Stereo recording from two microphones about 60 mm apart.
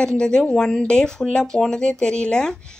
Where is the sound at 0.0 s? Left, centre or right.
Centre.